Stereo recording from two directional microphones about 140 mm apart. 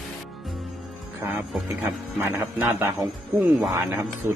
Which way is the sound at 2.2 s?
15° right (ahead or behind).